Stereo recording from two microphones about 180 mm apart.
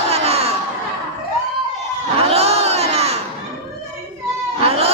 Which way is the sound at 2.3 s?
35° right (ahead or behind).